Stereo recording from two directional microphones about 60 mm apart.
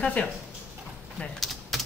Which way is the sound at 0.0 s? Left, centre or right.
Left.